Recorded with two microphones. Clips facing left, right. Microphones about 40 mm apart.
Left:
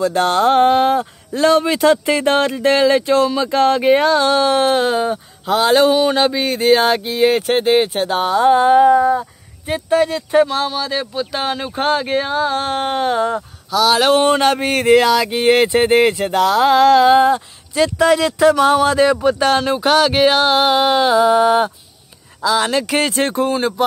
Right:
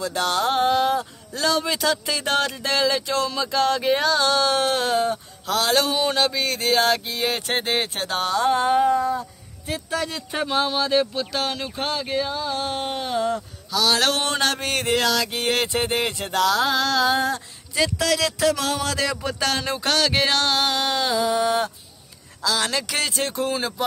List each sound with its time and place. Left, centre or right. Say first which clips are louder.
0.0 s speech: left 8 dB; left
7.3 s speech: left 10 dB; centre; by 10.0 s left
10.0 s speech: left 13 dB; centre
10.5 s speech: left 1 dB; centre
11.3 s speech: left 5 dB; left
11.7 s speech: left 8 dB; left
13.7 s speech: left 7 dB; centre; by 21.7 s left
22.4 s speech: left 7 dB; centre
22.8 s speech: left 8 dB; left
23.4 s speech: left 6 dB; centre